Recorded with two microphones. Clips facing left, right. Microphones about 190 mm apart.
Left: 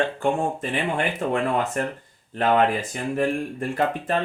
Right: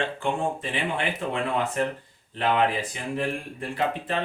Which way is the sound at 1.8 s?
50° left (ahead or behind).